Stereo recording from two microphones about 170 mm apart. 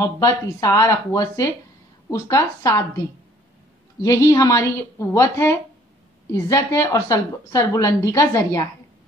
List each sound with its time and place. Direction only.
0.0 s a woman's voice: 15° left (ahead or behind)
4.0 s a woman's voice: 20° left (ahead or behind)